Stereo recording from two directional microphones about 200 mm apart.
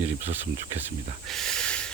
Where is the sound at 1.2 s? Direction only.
Centre (ahead or behind).